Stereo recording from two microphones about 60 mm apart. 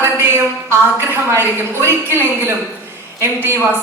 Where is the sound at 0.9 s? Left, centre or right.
Right.